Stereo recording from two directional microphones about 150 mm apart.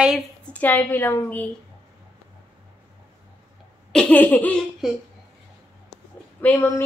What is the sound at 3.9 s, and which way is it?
Speech, 10° left (ahead or behind).